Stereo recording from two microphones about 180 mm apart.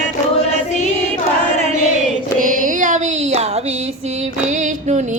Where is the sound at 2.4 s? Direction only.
45° right (ahead or behind).